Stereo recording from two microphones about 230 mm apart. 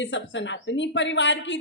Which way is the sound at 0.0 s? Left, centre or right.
Left.